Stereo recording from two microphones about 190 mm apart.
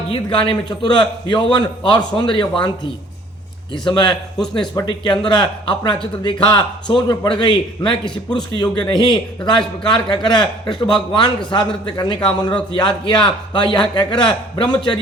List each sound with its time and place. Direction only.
0.1 s a man's voice: 25° left (ahead or behind)
3.7 s a man's voice: 25° left (ahead or behind)
11.5 s a man's voice: 25° left (ahead or behind)